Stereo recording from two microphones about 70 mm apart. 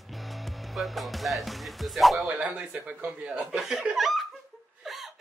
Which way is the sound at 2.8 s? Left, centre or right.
Right.